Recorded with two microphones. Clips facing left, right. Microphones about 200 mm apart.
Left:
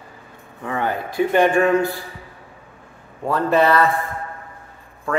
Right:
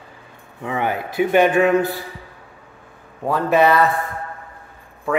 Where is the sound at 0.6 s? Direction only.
10° right (ahead or behind).